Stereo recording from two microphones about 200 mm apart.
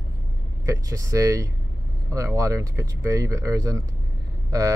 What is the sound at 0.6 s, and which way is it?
Speech, 15° right (ahead or behind).